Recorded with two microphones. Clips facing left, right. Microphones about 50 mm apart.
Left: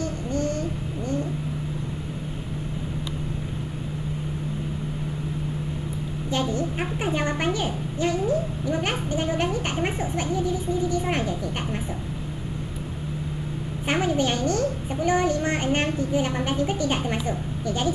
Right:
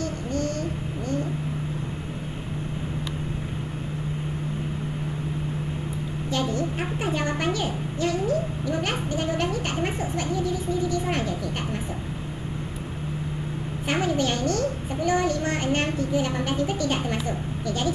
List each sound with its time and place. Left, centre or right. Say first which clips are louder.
6.5 s a child's voice: even; centre
13.8 s a child's voice: left 1 dB; left